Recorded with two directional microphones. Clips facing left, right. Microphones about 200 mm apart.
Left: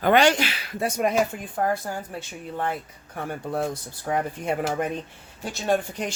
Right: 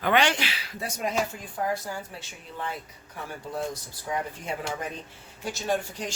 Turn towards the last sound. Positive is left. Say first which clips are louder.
# left 4 dB
turn(degrees=60)  # may be behind; listen again after turning